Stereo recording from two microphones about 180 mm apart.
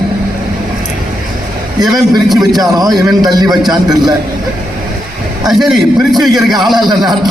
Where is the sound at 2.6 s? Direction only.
20° right (ahead or behind).